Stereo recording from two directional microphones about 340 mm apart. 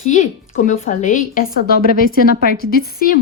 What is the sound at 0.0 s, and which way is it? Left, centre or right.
A woman's voice, left.